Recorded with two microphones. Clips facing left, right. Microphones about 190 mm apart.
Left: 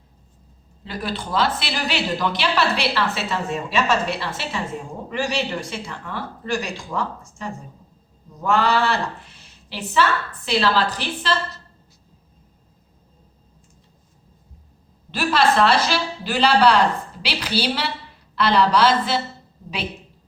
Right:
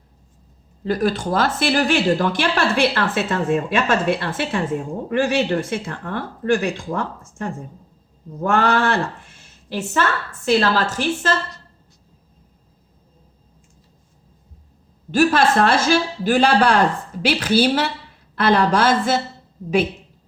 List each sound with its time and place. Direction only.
0.9 s speech: 45° right (ahead or behind)
8.4 s speech: 55° right (ahead or behind)
15.1 s speech: 50° right (ahead or behind)